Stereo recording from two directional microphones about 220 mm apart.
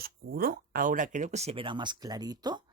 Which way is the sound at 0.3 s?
45° right (ahead or behind).